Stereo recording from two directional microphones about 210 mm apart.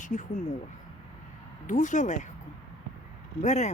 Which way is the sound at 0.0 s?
35° left (ahead or behind).